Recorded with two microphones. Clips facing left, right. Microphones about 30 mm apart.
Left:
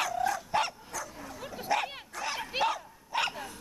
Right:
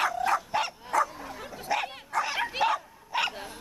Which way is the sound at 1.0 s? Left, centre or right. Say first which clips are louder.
Right 3 dB; right.